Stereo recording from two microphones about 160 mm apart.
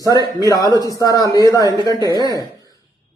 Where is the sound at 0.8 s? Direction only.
20° left (ahead or behind).